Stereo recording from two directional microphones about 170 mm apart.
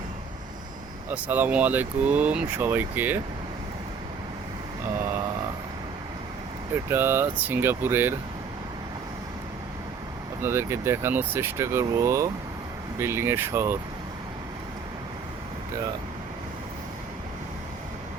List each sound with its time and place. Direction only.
1.1 s speech: 10° right (ahead or behind)
6.9 s speech: 15° right (ahead or behind)
10.4 s speech: 15° right (ahead or behind)